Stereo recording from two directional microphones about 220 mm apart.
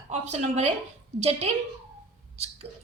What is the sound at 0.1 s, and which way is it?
A woman's voice, 30° right (ahead or behind).